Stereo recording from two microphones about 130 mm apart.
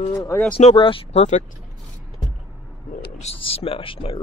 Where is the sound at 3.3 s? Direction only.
45° left (ahead or behind).